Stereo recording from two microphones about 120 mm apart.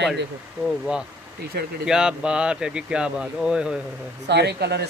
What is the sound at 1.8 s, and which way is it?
Speech, 5° right (ahead or behind).